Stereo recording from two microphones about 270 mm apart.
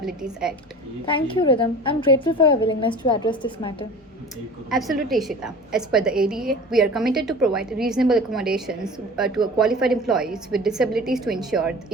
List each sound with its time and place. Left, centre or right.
0.0 s a woman's voice: centre
1.0 s a woman's voice: centre
4.7 s a woman's voice: centre